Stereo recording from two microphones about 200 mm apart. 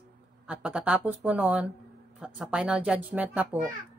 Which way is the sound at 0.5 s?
5° right (ahead or behind).